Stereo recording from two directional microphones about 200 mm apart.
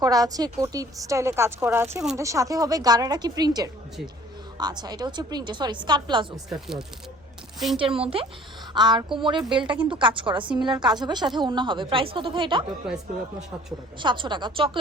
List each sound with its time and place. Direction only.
0.0 s a woman's voice: 20° right (ahead or behind)
6.5 s speech: centre (ahead or behind)
7.8 s a woman's voice: 30° right (ahead or behind)
9.4 s speech: 5° right (ahead or behind)
9.9 s a woman's voice: 25° right (ahead or behind)
14.0 s a woman's voice: 25° right (ahead or behind)